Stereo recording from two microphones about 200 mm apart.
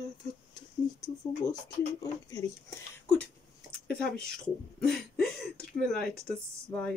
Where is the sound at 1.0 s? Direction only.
20° left (ahead or behind).